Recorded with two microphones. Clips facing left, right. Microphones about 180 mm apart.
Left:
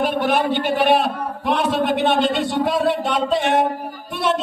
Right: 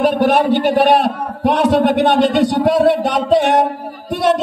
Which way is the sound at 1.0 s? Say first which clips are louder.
Right 5 dB; 70° right (ahead or behind).